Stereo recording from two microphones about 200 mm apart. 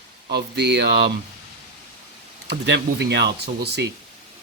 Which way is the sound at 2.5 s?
55° right (ahead or behind).